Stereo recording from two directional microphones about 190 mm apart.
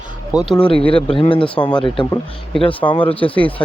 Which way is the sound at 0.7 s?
30° left (ahead or behind).